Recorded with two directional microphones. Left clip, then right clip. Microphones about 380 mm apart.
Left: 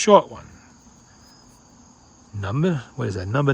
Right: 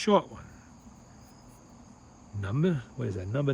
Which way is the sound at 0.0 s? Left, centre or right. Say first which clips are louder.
Left 11 dB; centre.